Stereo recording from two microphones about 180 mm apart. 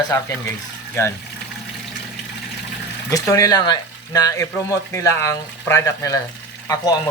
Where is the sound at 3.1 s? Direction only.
20° left (ahead or behind).